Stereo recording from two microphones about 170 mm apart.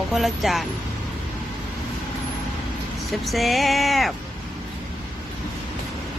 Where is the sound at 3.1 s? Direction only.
Centre (ahead or behind).